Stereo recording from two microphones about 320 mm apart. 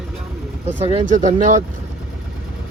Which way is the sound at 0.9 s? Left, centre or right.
Right.